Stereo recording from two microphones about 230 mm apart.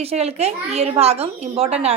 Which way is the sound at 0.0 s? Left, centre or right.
Right.